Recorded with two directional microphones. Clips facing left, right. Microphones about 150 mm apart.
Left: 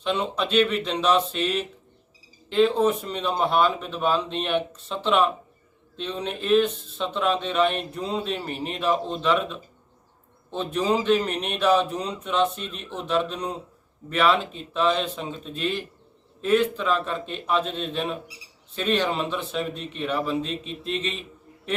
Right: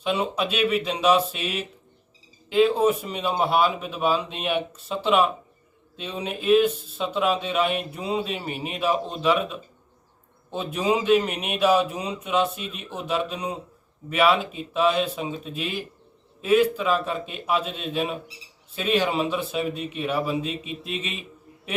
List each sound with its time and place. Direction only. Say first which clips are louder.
0.0 s speech: right 1 dB; 5° right (ahead or behind)